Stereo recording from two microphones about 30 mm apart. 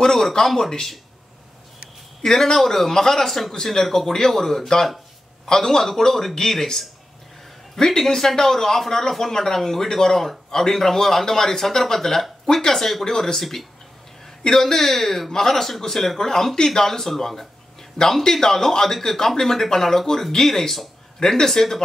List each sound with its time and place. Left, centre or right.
0.0 s speech: centre
2.2 s a man's voice: centre
4.8 s a sound: centre
5.5 s a man's voice: centre
16.3 s a man's voice: centre
18.2 s a man's voice: centre